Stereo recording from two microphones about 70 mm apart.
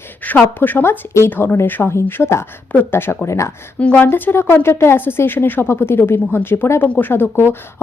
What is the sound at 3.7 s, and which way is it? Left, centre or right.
A woman's voice, left.